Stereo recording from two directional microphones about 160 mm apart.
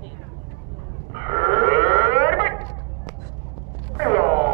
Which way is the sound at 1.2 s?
35° right (ahead or behind).